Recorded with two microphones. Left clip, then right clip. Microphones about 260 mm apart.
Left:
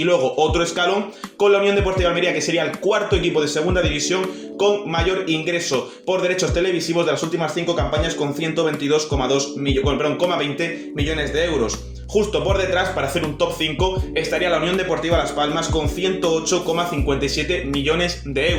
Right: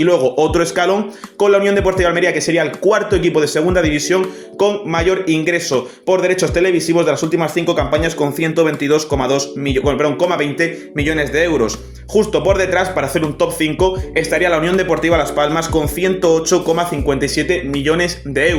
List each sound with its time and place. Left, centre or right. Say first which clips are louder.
0.0 s speech: right 4 dB; right